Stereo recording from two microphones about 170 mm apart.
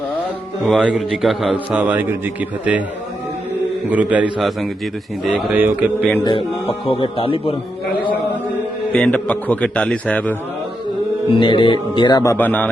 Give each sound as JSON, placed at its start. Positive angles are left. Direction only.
{"t": 0.6, "sound": "a man's voice", "side_deg": -5}
{"t": 3.8, "sound": "a man's voice", "side_deg": -10}
{"t": 6.2, "sound": "speech", "side_deg": 30}
{"t": 8.9, "sound": "a man's voice", "side_deg": 10}
{"t": 11.3, "sound": "a man's voice", "side_deg": 30}